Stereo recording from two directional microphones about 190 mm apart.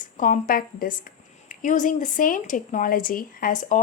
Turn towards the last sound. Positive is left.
turn(degrees=40)  # may be behind; listen again after turning